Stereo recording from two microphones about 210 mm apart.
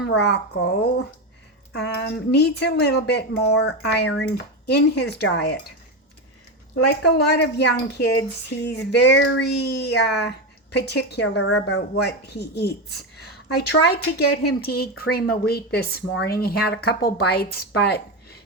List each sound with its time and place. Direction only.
0.0 s speech: 55° left (ahead or behind)
6.7 s speech: 50° left (ahead or behind)
11.5 s speech: 90° left
12.0 s speech: 50° left (ahead or behind)
14.6 s speech: 45° left (ahead or behind)